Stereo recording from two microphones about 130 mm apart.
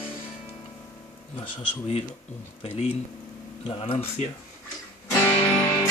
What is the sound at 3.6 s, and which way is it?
Speech, 50° left (ahead or behind).